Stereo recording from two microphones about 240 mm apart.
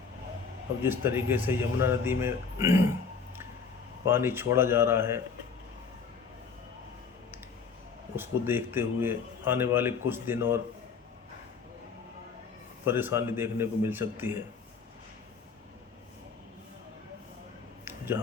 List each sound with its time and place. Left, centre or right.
0.8 s speech: centre
4.0 s speech: centre
8.1 s speech: centre
12.8 s speech: centre
17.8 s a sound: centre